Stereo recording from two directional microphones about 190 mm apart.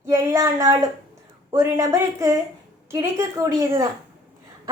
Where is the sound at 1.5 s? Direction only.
15° right (ahead or behind).